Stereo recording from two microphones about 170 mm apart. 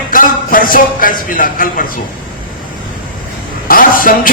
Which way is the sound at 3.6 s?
55° left (ahead or behind).